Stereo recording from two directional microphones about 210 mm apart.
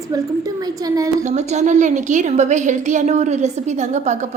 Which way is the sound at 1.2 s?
30° right (ahead or behind).